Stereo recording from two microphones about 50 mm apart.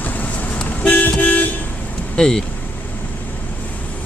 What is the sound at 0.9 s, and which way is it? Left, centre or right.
Toot, left.